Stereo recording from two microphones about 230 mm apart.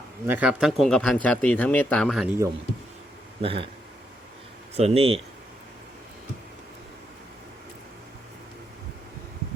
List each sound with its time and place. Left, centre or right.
0.3 s speech: centre
3.4 s speech: right
4.8 s speech: right